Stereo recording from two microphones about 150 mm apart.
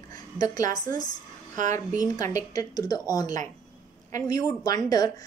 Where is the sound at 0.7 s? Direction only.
25° left (ahead or behind).